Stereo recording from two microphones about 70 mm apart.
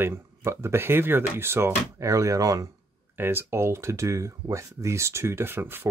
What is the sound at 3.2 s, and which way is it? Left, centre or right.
Speech, right.